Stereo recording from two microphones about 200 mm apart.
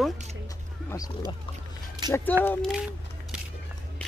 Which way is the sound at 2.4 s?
10° left (ahead or behind).